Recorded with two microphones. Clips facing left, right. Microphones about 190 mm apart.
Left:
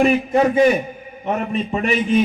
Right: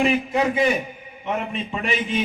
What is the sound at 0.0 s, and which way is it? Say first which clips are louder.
A man's voice: left 5 dB; 45° left (ahead or behind).